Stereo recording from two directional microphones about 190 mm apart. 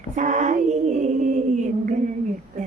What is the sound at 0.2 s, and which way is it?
Female singing, 40° right (ahead or behind).